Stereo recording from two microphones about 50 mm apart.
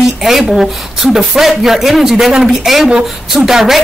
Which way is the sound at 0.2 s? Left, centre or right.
Centre.